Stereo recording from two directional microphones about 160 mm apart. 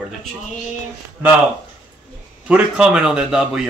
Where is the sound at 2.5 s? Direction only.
5° right (ahead or behind).